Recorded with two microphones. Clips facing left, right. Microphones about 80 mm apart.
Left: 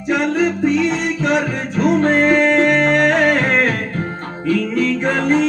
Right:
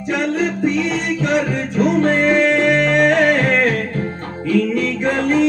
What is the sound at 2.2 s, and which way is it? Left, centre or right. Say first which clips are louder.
Music: left 1 dB; left.